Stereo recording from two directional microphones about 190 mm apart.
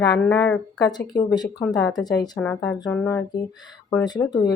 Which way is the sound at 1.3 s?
20° left (ahead or behind).